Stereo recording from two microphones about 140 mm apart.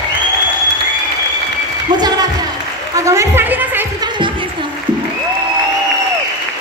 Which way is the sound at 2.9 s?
20° right (ahead or behind).